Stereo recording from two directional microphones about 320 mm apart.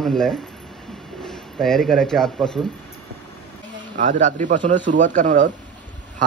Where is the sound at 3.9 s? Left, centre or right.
Right.